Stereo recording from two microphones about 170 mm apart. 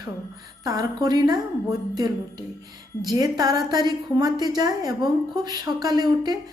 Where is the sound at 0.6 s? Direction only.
20° right (ahead or behind).